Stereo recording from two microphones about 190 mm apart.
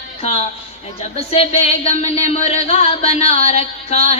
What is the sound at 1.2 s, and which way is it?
Speech, 30° left (ahead or behind).